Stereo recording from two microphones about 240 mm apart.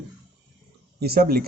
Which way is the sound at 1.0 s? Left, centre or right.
Right.